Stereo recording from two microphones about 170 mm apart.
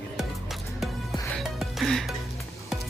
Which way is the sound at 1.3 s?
Centre (ahead or behind).